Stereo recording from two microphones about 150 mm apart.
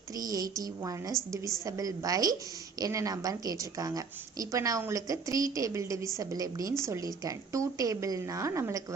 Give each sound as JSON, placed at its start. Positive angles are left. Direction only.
{"t": 0.3, "sound": "a woman's voice", "side_deg": -25}